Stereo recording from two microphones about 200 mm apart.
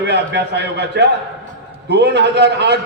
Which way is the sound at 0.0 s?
55° right (ahead or behind).